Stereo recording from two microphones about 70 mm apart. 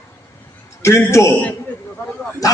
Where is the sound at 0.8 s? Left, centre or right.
Left.